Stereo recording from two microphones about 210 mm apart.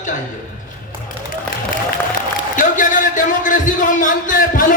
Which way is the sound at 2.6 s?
40° left (ahead or behind).